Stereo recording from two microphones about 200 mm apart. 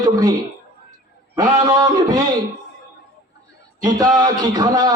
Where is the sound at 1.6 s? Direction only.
20° right (ahead or behind).